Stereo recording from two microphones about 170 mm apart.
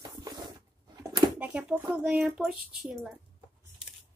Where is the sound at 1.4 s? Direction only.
5° right (ahead or behind).